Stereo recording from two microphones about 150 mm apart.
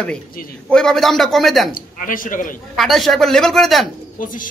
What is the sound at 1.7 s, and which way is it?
Speech, 65° left (ahead or behind).